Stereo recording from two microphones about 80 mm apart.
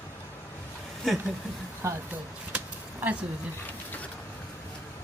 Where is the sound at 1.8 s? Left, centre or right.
Right.